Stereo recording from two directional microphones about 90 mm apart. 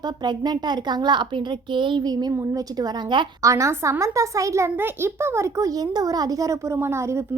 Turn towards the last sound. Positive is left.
turn(degrees=-30)  # may be behind; listen again after turning